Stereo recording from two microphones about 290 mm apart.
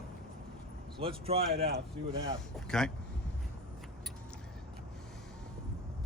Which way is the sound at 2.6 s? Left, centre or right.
Centre.